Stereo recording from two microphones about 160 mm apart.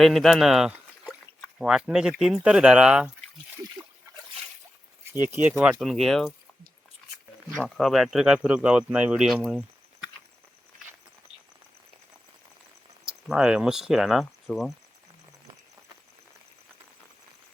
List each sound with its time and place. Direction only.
0.0 s speech: centre (ahead or behind)
5.2 s speech: 10° right (ahead or behind)
7.5 s speech: centre (ahead or behind)
13.1 s speech: 5° right (ahead or behind)